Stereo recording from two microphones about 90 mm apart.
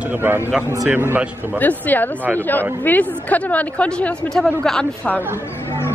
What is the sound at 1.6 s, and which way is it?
A woman's voice, 20° left (ahead or behind).